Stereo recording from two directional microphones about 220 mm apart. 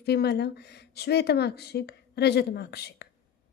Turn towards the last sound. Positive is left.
turn(degrees=45)  # may be behind; listen again after turning